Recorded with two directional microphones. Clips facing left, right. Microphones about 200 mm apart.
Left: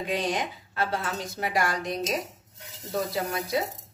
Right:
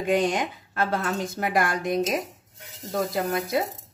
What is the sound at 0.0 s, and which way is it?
Speech, 50° right (ahead or behind).